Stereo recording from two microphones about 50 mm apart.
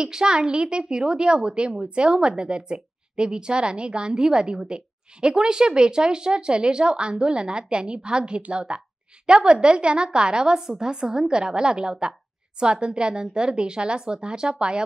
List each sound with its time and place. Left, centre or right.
0.0 s a woman's voice: centre